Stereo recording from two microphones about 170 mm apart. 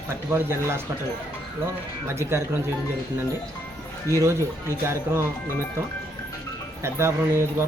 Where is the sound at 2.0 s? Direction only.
15° right (ahead or behind).